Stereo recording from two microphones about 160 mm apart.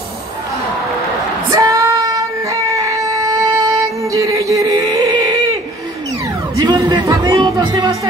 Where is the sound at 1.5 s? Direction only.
20° right (ahead or behind).